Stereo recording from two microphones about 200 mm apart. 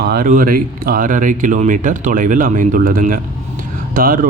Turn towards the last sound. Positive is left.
turn(degrees=-45)  # may be behind; listen again after turning